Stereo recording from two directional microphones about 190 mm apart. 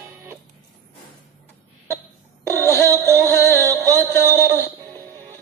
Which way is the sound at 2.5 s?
15° right (ahead or behind).